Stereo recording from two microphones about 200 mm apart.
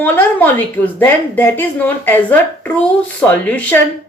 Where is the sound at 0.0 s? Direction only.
10° left (ahead or behind).